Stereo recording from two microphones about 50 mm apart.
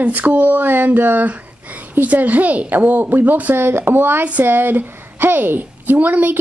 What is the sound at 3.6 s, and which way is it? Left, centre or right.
A child's voice, right.